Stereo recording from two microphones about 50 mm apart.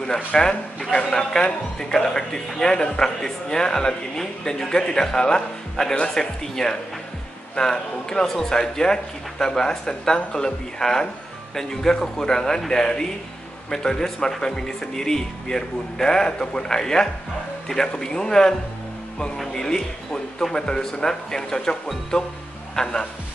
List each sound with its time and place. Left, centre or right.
0.0 s a man's voice: centre